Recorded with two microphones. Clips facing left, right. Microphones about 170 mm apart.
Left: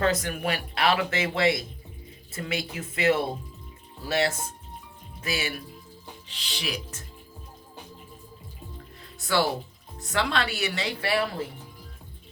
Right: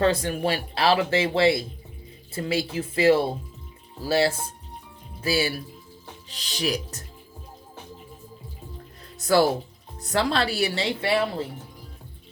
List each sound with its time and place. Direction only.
0.0 s speech: 30° right (ahead or behind)
9.1 s speech: 40° right (ahead or behind); by 11.3 s 25° right (ahead or behind)